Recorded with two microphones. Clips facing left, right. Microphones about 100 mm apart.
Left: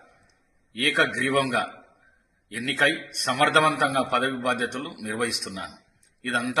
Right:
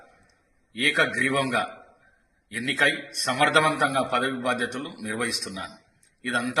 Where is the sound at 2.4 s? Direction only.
55° left (ahead or behind).